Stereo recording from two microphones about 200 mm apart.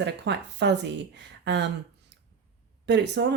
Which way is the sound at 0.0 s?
60° right (ahead or behind).